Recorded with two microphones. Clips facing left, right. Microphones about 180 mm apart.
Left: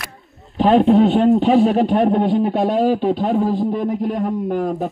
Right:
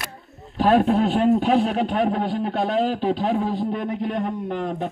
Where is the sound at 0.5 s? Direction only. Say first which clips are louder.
Left 5 dB; centre (ahead or behind).